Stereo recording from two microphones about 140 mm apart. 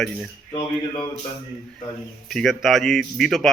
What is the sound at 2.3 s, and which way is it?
A man's voice, centre (ahead or behind).